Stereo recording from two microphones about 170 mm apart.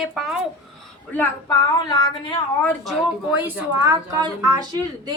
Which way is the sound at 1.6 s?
25° left (ahead or behind).